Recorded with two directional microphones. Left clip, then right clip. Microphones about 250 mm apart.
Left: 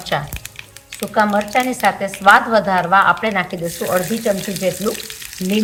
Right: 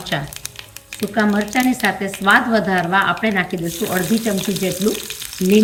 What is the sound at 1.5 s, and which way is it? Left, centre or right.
A woman's voice, left.